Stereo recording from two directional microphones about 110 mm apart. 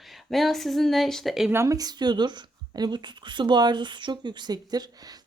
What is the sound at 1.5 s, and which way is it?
Speech, 25° right (ahead or behind).